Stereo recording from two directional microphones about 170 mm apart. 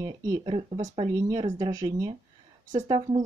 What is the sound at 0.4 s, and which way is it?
Speech, 35° right (ahead or behind).